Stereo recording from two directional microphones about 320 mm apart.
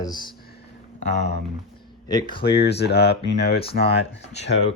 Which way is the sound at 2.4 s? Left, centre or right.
Left.